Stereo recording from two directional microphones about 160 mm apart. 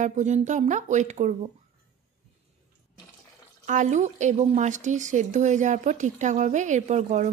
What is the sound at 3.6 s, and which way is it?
Speech, 50° right (ahead or behind).